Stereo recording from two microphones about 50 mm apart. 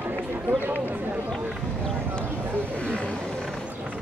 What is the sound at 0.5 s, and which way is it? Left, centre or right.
Speech, right.